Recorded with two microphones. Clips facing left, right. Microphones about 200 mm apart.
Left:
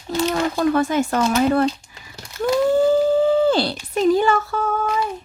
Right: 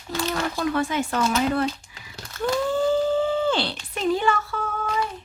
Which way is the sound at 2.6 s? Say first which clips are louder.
Left 6 dB; 40° left (ahead or behind).